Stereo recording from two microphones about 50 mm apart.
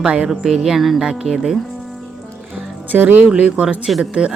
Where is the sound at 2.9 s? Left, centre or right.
Right.